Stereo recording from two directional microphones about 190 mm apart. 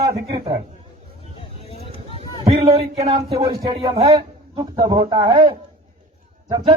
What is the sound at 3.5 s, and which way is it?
A man's voice, 25° right (ahead or behind).